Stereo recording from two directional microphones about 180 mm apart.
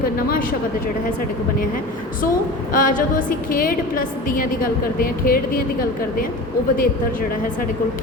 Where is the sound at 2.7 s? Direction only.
50° left (ahead or behind).